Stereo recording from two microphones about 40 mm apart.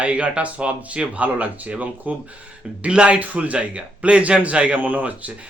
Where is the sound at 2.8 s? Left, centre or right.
Right.